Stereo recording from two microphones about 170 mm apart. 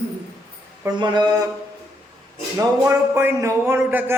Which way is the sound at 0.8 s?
20° right (ahead or behind).